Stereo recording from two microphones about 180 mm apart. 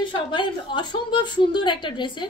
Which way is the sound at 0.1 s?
25° left (ahead or behind).